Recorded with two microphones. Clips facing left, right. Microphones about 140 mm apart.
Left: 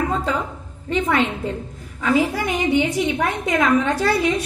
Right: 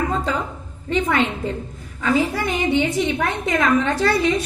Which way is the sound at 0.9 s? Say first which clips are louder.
Even; centre (ahead or behind).